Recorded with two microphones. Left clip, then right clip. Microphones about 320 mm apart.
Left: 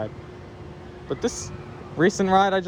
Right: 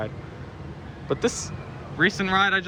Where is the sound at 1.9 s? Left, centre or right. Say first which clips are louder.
Left 2 dB; centre.